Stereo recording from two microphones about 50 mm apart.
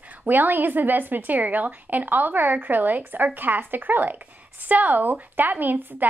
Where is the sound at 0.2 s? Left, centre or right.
Right.